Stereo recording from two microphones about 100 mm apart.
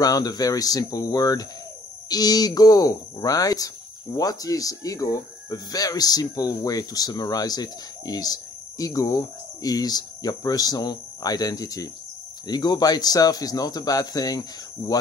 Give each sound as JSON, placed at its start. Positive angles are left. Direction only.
{"t": 0.0, "sound": "speech", "side_deg": 40}